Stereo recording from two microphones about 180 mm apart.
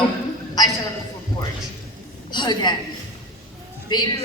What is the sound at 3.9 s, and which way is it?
Speech, 25° left (ahead or behind).